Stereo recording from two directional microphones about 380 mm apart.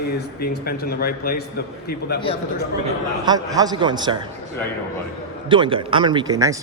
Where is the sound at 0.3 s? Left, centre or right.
Left.